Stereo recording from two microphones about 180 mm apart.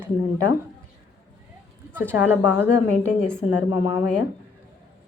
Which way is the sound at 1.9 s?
10° right (ahead or behind).